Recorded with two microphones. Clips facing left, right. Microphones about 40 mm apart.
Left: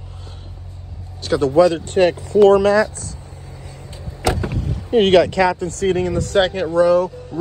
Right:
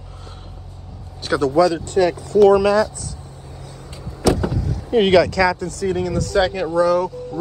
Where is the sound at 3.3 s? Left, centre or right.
Left.